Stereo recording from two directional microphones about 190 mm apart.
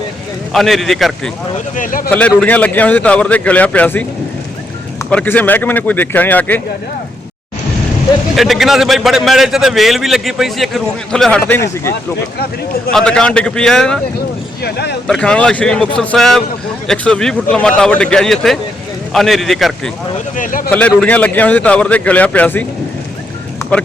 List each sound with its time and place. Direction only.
0.5 s a man's voice: centre (ahead or behind)
1.7 s speech: 45° left (ahead or behind)
2.0 s speech: 5° left (ahead or behind)
5.0 s speech: 10° left (ahead or behind)
8.4 s a man's voice: centre (ahead or behind)
14.6 s speech: 60° left (ahead or behind)
15.0 s a man's voice: 5° left (ahead or behind)
20.3 s speech: 45° left (ahead or behind)
20.7 s speech: 10° left (ahead or behind)